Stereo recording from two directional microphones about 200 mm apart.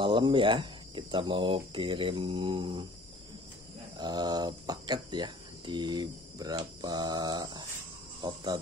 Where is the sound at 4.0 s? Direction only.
20° right (ahead or behind).